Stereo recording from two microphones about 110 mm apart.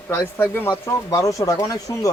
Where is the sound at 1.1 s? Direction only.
30° left (ahead or behind).